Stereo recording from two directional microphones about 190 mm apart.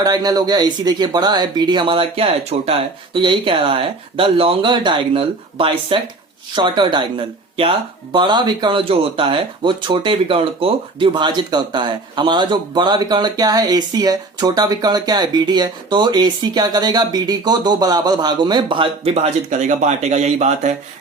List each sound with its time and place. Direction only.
0.0 s speech: 20° right (ahead or behind); by 20.7 s 35° right (ahead or behind)